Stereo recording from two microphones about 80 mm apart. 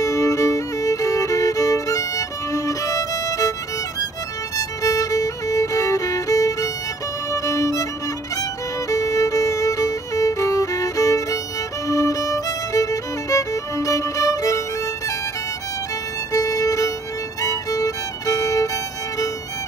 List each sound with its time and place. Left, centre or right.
0.0 s music: left
4.6 s violin: left
11.9 s music: left
16.3 s violin: left
17.4 s music: left